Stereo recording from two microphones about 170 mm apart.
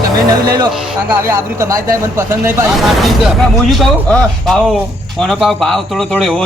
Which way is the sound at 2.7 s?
Centre (ahead or behind).